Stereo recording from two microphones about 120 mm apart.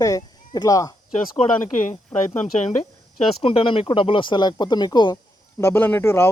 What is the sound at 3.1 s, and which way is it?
Speech, 50° left (ahead or behind).